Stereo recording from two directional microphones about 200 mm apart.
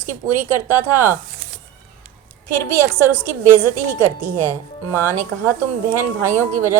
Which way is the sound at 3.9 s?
10° right (ahead or behind).